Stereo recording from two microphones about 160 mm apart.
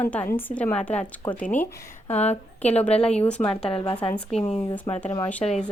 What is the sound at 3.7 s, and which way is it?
Speech, 30° left (ahead or behind).